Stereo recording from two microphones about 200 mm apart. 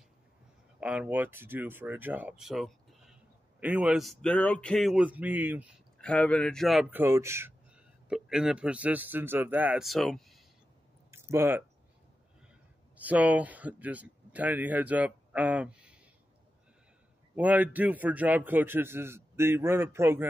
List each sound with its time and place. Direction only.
0.7 s speech: 5° right (ahead or behind)
5.9 s speech: 5° left (ahead or behind)
11.1 s a sound: 15° right (ahead or behind)
12.9 s speech: 10° right (ahead or behind)
17.4 s a man's voice: 10° right (ahead or behind)